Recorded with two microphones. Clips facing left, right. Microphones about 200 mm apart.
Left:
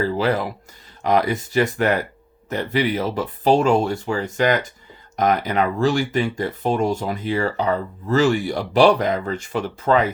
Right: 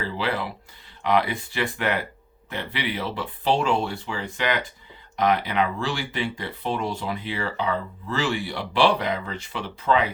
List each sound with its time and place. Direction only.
0.0 s speech: 45° left (ahead or behind)